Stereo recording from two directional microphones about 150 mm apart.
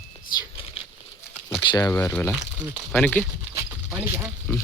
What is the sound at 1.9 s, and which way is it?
Speech, 15° left (ahead or behind).